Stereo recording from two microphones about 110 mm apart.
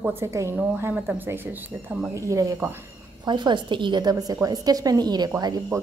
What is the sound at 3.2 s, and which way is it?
A woman's voice, 45° right (ahead or behind).